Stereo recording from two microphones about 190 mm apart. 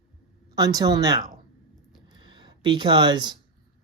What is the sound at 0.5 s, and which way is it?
Speech, 20° right (ahead or behind).